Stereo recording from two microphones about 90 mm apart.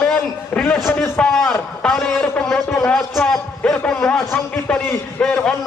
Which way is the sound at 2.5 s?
30° left (ahead or behind).